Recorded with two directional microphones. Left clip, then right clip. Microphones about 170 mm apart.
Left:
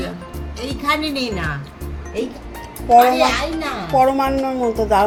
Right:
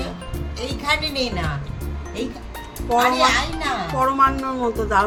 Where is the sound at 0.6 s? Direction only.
90° right.